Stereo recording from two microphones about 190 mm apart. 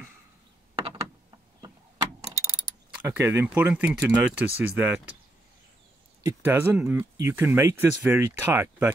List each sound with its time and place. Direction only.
0.8 s a sound: 20° right (ahead or behind)
3.0 s speech: 10° right (ahead or behind)
6.2 s speech: 10° right (ahead or behind)